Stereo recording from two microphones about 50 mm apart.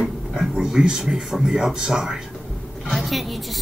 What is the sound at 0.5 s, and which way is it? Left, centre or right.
A woman's voice, centre.